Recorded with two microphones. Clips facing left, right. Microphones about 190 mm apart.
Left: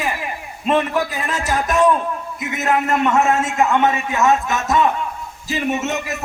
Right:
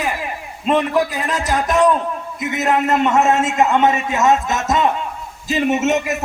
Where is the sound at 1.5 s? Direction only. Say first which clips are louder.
Right 1 dB; 20° right (ahead or behind).